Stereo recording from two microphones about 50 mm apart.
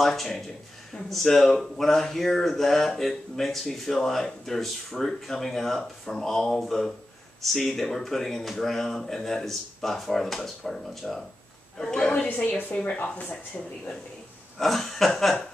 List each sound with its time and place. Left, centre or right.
0.0 s speech: centre
12.1 s a woman's voice: left
12.9 s speech: left
14.6 s speech: centre